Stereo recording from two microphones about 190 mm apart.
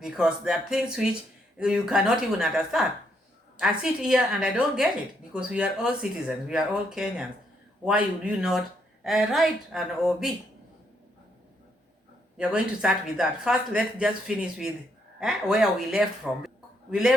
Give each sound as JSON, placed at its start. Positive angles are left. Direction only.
{"t": 0.0, "sound": "speech", "side_deg": -5}
{"t": 12.4, "sound": "speech", "side_deg": -5}